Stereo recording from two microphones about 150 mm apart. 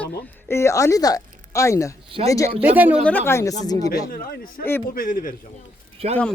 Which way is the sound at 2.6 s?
10° right (ahead or behind).